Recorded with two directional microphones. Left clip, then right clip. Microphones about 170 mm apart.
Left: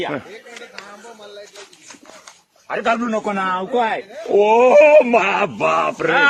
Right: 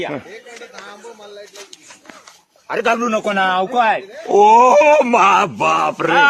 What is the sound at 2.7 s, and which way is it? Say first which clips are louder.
A man's voice: right 3 dB; 60° right (ahead or behind).